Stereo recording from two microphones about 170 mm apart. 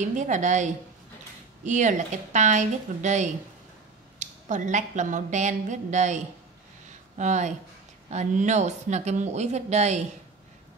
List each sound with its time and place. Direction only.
0.0 s speech: 45° right (ahead or behind)
7.2 s speech: 45° right (ahead or behind)